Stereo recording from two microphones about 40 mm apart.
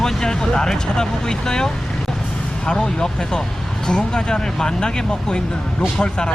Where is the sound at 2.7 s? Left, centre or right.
Centre.